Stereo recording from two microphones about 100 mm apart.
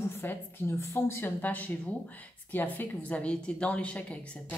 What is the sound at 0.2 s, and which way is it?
A woman's voice, 25° left (ahead or behind).